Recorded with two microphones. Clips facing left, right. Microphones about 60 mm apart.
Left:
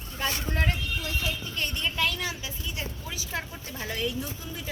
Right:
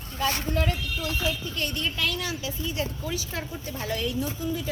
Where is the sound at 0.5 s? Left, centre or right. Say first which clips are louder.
Right 2 dB; left.